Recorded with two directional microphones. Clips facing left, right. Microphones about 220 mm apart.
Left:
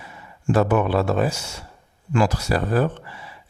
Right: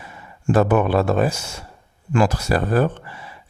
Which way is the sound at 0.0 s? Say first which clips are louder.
Right 2 dB; 50° right (ahead or behind).